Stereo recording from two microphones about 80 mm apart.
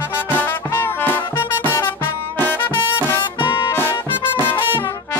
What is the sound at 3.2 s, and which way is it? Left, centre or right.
Music, left.